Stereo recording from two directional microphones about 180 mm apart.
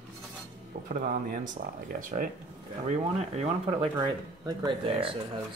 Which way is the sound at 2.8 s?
35° right (ahead or behind).